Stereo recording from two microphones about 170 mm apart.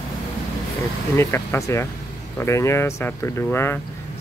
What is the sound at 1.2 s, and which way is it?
Speech, 15° left (ahead or behind).